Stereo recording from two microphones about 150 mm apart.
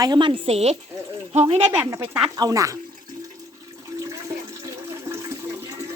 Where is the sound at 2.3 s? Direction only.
25° right (ahead or behind).